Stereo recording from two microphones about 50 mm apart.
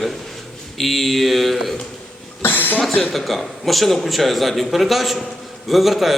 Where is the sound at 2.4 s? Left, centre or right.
Left.